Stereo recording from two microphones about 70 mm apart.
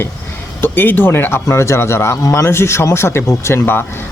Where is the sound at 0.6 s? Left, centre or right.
Left.